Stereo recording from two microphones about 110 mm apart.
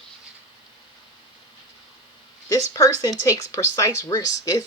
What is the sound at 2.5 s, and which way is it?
Speech, 35° left (ahead or behind).